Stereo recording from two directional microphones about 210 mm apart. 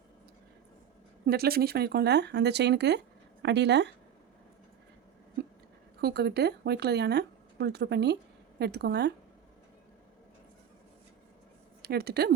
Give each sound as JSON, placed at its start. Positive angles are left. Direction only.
{"t": 1.3, "sound": "speech", "side_deg": -45}
{"t": 6.0, "sound": "speech", "side_deg": -50}
{"t": 11.8, "sound": "speech", "side_deg": -50}